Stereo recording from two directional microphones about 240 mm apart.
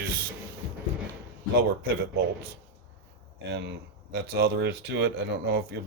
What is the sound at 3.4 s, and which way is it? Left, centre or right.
Speech, right.